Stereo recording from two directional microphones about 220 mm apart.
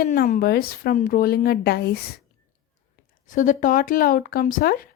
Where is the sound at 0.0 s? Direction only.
40° left (ahead or behind).